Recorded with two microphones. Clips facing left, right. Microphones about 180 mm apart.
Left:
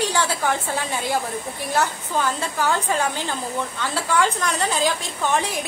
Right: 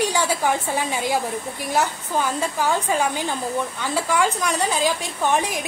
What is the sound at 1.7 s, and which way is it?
A woman's voice, 15° right (ahead or behind).